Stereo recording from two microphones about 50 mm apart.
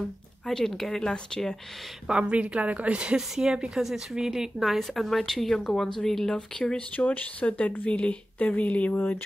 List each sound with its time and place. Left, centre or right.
0.5 s speech: centre
2.0 s a woman's voice: right
4.7 s speech: centre
6.6 s speech: left